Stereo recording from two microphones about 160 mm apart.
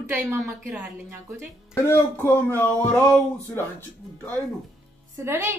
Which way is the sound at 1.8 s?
15° left (ahead or behind).